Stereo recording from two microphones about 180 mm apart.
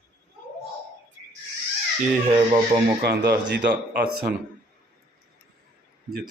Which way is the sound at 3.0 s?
65° right (ahead or behind).